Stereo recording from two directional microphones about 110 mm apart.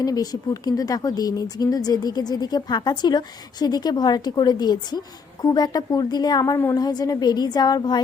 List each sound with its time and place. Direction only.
0.0 s speech: 35° left (ahead or behind)